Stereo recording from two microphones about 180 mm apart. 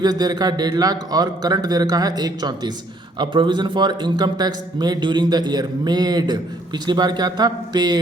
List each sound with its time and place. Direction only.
0.0 s a man's voice: 20° right (ahead or behind)